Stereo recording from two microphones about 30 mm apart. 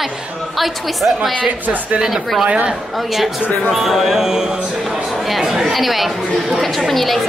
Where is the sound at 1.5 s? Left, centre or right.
Right.